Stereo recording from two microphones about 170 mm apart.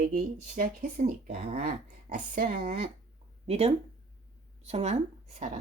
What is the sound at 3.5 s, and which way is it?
Speech, 35° right (ahead or behind).